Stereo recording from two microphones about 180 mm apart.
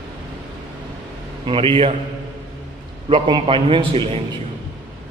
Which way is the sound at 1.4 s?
30° right (ahead or behind).